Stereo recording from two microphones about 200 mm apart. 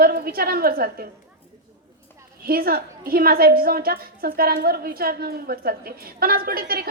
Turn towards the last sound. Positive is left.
turn(degrees=-50)  # may be behind; listen again after turning